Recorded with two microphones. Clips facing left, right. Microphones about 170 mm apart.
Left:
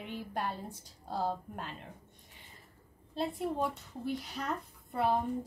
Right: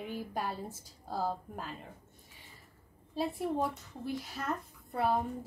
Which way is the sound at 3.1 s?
Centre (ahead or behind).